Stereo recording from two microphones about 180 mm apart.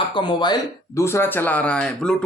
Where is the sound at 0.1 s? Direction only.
25° left (ahead or behind).